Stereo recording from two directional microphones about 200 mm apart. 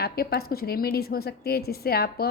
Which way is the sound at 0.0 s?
50° left (ahead or behind).